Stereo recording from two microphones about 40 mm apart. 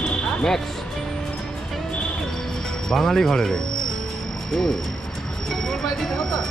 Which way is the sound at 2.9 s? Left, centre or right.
Centre.